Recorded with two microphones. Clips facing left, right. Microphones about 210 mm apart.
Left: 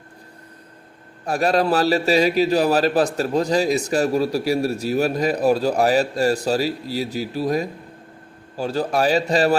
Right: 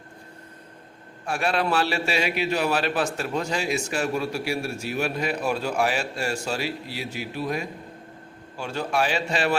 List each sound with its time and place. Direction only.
1.2 s a man's voice: 40° left (ahead or behind)